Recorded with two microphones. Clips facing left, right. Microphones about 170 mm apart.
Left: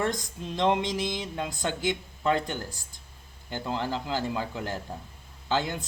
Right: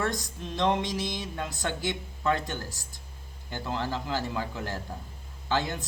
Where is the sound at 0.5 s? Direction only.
20° left (ahead or behind).